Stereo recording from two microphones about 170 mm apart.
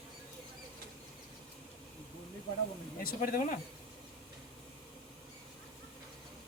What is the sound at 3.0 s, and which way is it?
Speech, 55° left (ahead or behind).